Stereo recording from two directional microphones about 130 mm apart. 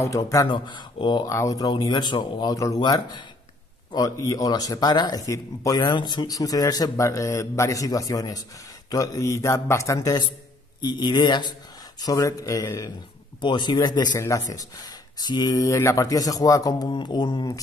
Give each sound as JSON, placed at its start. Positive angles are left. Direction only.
{"t": 0.0, "sound": "speech", "side_deg": 25}
{"t": 1.3, "sound": "speech", "side_deg": 25}
{"t": 13.4, "sound": "speech", "side_deg": 35}